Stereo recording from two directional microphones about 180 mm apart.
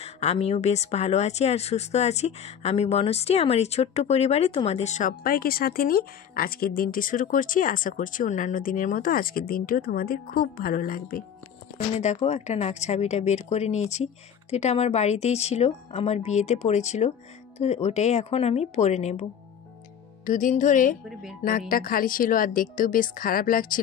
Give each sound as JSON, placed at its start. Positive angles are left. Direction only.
{"t": 0.0, "sound": "speech", "side_deg": 35}
{"t": 11.9, "sound": "speech", "side_deg": 40}
{"t": 20.2, "sound": "speech", "side_deg": 45}